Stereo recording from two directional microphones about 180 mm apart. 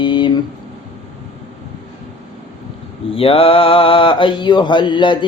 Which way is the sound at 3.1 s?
30° left (ahead or behind).